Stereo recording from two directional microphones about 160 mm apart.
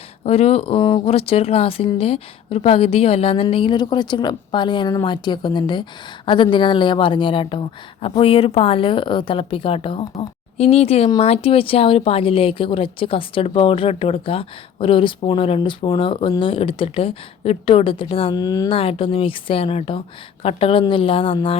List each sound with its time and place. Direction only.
0.3 s speech: 40° left (ahead or behind); by 18.7 s 25° left (ahead or behind)
18.7 s speech: 35° left (ahead or behind)